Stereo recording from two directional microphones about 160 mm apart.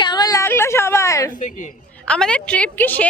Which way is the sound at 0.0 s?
25° left (ahead or behind).